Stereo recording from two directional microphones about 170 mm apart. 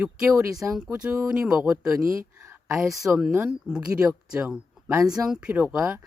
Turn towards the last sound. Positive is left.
turn(degrees=-5)  # may be behind; listen again after turning